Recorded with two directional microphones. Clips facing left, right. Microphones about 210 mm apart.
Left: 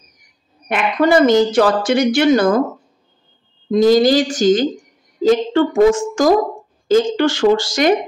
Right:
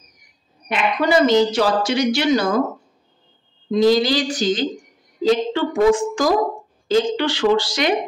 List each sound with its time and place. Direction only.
0.7 s speech: 50° left (ahead or behind)
3.7 s speech: 45° left (ahead or behind)